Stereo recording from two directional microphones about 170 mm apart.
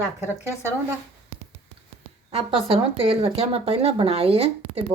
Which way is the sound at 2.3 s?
35° right (ahead or behind).